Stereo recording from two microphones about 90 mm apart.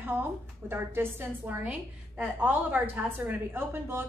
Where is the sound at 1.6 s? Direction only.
15° right (ahead or behind).